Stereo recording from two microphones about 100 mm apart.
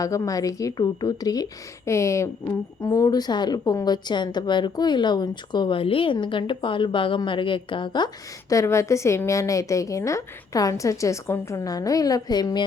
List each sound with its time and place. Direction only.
0.0 s a woman's voice: 35° left (ahead or behind); by 8.1 s 50° left (ahead or behind)
8.4 s a woman's voice: 30° left (ahead or behind)